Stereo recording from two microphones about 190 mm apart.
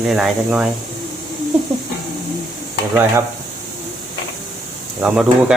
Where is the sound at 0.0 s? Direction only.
Centre (ahead or behind).